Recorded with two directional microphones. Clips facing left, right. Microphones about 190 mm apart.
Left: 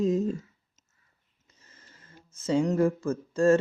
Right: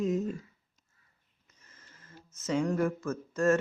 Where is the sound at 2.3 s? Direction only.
30° left (ahead or behind).